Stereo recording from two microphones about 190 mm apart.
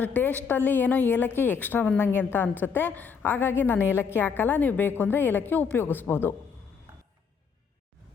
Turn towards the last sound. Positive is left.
turn(degrees=10)  # may be behind; listen again after turning